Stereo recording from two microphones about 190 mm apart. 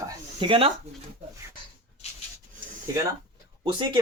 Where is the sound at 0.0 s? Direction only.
25° right (ahead or behind).